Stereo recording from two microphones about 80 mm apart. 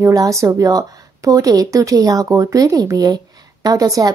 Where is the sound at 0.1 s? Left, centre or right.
Right.